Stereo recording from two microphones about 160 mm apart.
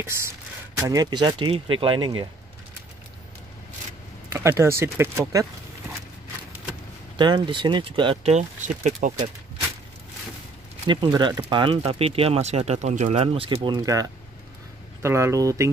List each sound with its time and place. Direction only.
0.7 s speech: 20° right (ahead or behind)
4.3 s speech: 15° right (ahead or behind)
7.2 s speech: 30° right (ahead or behind); by 9.1 s 50° right (ahead or behind)
10.9 s speech: 30° right (ahead or behind)